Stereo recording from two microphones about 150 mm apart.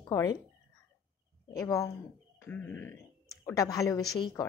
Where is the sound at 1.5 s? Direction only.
20° left (ahead or behind).